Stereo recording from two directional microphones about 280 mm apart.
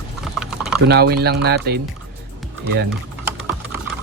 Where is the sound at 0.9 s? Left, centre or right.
Right.